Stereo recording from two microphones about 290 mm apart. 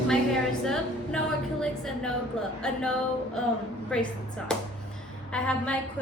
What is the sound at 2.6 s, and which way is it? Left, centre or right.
A woman's voice, centre.